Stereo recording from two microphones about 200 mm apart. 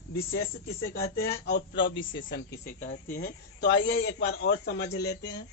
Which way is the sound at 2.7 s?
40° left (ahead or behind).